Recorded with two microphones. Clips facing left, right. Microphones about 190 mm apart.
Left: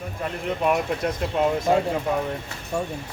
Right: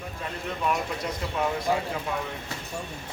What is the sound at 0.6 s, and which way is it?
Speech, 55° left (ahead or behind).